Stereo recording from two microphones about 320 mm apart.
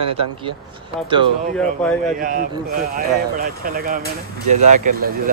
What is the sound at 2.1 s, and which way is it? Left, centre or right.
Speech, right.